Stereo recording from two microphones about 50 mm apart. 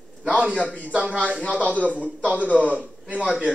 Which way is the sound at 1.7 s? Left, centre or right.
Right.